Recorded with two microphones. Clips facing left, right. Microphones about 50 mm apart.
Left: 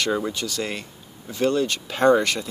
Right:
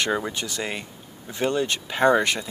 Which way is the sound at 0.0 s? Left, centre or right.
Right.